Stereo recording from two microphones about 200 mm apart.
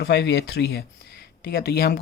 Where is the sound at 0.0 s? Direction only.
60° left (ahead or behind).